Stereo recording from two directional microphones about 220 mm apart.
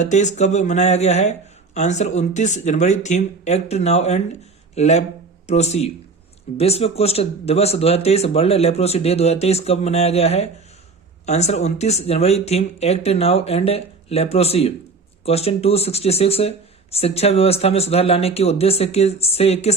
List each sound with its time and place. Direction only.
0.0 s speech: 35° left (ahead or behind)